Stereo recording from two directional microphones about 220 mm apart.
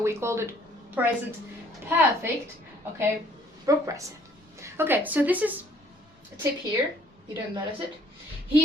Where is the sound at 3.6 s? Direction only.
15° right (ahead or behind).